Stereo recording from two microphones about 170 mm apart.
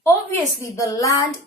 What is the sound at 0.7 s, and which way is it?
Speech, 20° left (ahead or behind).